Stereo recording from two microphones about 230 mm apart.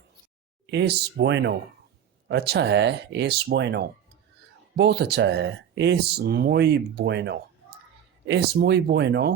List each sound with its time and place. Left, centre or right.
0.7 s speech: right